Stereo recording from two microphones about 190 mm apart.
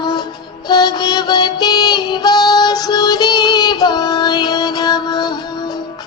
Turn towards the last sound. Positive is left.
turn(degrees=20)  # may be behind; listen again after turning